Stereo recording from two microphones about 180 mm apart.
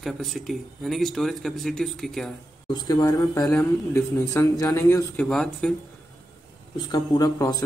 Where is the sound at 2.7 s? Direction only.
25° left (ahead or behind).